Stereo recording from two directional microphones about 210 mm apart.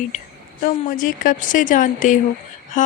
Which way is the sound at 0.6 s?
40° left (ahead or behind).